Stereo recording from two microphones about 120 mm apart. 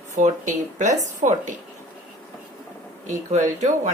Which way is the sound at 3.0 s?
90° right.